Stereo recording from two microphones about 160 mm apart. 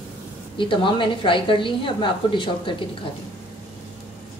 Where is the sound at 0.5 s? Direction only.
30° left (ahead or behind).